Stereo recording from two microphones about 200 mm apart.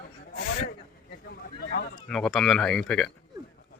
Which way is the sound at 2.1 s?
Centre (ahead or behind).